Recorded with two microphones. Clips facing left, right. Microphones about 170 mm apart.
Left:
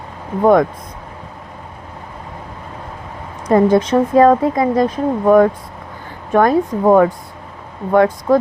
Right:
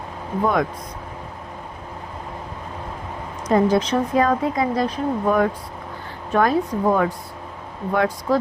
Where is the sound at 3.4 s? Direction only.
55° left (ahead or behind).